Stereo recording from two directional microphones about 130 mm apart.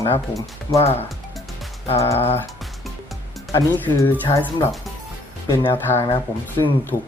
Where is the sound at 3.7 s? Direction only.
15° left (ahead or behind).